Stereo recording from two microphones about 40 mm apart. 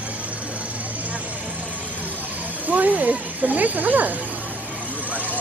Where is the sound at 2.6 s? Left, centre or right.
Right.